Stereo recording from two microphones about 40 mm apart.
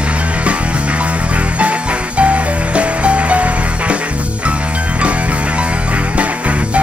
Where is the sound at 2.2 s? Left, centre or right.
Right.